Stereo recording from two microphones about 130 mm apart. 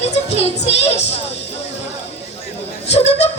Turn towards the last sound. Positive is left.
turn(degrees=55)  # may be behind; listen again after turning